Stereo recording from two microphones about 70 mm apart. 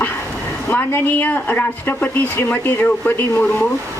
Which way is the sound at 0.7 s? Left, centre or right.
Left.